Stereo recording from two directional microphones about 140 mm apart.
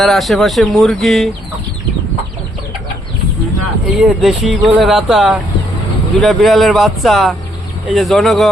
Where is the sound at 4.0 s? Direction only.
5° right (ahead or behind).